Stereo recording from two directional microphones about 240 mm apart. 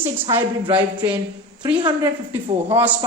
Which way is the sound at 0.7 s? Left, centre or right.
Centre.